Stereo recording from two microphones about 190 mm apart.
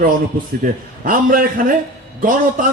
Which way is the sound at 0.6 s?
45° right (ahead or behind).